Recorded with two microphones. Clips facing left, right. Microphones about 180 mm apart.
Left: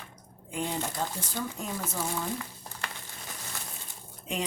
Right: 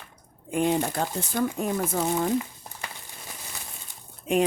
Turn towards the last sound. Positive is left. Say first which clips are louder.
# right 11 dB
turn(degrees=-55)  # may be behind; listen again after turning